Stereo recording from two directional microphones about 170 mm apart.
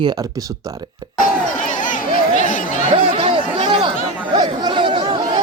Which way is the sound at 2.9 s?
35° right (ahead or behind).